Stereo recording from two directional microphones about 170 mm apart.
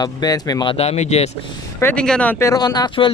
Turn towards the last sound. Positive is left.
turn(degrees=25)  # may be behind; listen again after turning